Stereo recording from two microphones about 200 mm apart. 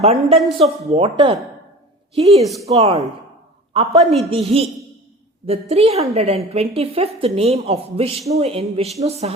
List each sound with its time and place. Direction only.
0.0 s speech: 30° right (ahead or behind)
4.3 s speech: 30° right (ahead or behind)